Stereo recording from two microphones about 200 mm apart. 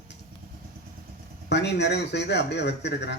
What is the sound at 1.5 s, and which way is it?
A man's voice, 60° left (ahead or behind).